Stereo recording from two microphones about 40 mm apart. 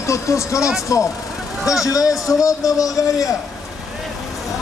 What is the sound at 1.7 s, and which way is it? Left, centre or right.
Speech, centre.